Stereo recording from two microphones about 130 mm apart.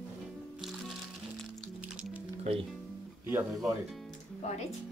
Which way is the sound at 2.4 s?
50° right (ahead or behind).